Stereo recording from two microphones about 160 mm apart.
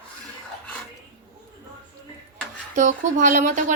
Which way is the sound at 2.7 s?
50° right (ahead or behind).